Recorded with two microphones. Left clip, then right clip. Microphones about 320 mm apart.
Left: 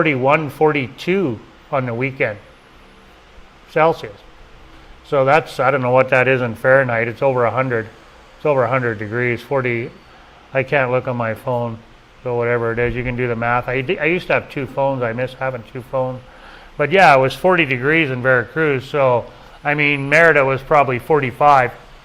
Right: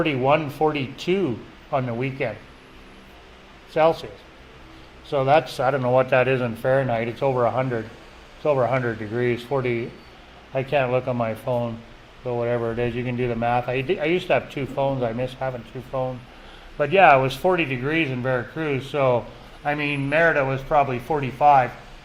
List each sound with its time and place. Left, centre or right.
0.2 s speech: left
2.0 s a man's voice: left
3.7 s a man's voice: left
5.0 s speech: left
19.6 s a man's voice: left